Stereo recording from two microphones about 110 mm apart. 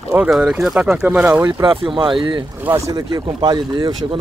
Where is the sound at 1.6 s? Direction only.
45° right (ahead or behind).